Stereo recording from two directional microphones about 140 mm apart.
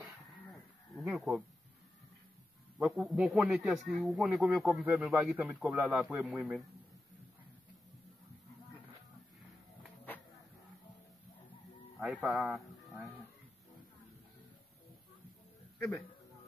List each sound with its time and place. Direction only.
1.1 s speech: centre (ahead or behind)
3.1 s speech: centre (ahead or behind)
4.8 s a man's voice: 10° right (ahead or behind)
12.0 s speech: 10° right (ahead or behind)